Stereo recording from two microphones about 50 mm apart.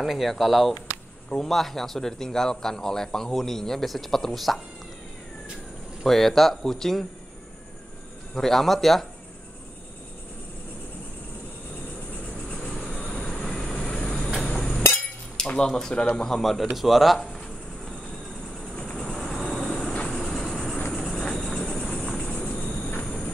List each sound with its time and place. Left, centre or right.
0.0 s speech: centre
6.0 s speech: centre
8.4 s speech: centre
12.7 s train: centre
14.4 s hammer: centre
15.3 s speech: centre
16.2 s speech: centre
19.1 s vehicle: centre
20.1 s train: centre
20.9 s a sound: centre
22.0 s horse: centre
22.7 s train: centre